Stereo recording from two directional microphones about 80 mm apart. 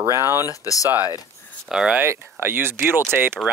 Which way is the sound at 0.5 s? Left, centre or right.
Left.